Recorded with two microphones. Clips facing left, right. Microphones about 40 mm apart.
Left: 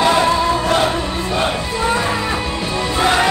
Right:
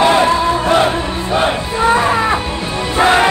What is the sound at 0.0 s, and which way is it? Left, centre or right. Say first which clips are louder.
Music: right 3 dB; right.